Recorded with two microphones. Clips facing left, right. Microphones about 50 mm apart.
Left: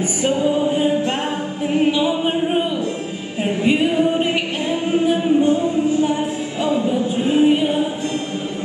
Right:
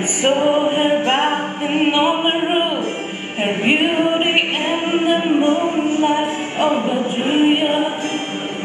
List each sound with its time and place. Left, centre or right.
0.2 s a capella: right